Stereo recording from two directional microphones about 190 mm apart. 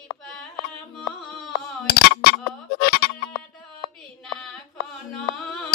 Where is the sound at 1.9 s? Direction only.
55° left (ahead or behind).